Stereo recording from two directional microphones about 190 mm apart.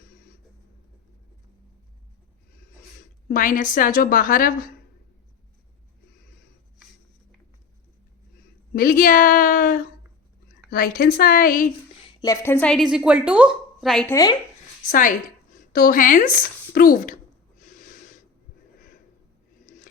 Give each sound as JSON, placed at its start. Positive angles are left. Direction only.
{"t": 3.2, "sound": "speech", "side_deg": 45}
{"t": 8.7, "sound": "speech", "side_deg": 50}
{"t": 12.2, "sound": "a woman's voice", "side_deg": 15}
{"t": 14.8, "sound": "speech", "side_deg": 45}
{"t": 17.6, "sound": "a sound", "side_deg": 45}
{"t": 19.6, "sound": "a sound", "side_deg": 45}